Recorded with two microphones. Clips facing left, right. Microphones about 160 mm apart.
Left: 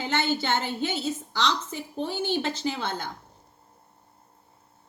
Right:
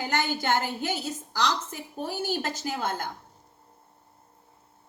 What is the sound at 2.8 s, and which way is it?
Speech, 50° right (ahead or behind).